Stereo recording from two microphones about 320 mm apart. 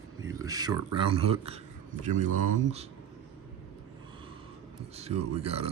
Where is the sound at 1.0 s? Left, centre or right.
Centre.